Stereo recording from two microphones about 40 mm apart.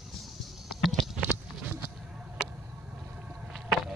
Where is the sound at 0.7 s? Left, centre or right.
Centre.